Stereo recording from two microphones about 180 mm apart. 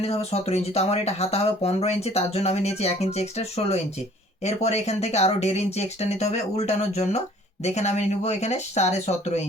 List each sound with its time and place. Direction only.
0.0 s speech: 35° left (ahead or behind)